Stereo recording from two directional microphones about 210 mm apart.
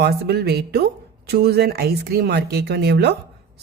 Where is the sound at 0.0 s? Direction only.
50° right (ahead or behind).